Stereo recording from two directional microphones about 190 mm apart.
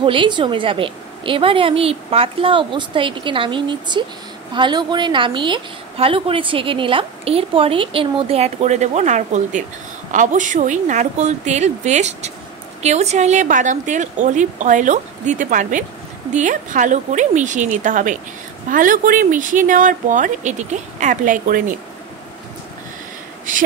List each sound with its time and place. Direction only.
0.0 s a woman's voice: 25° right (ahead or behind); by 21.6 s 45° right (ahead or behind)
23.5 s speech: 45° right (ahead or behind)